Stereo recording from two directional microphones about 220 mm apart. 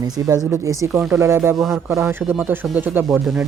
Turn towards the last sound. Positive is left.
turn(degrees=0)  # may be behind; listen again after turning